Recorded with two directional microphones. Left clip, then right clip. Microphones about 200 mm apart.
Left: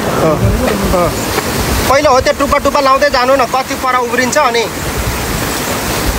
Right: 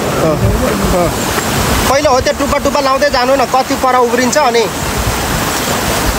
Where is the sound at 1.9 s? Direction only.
10° right (ahead or behind).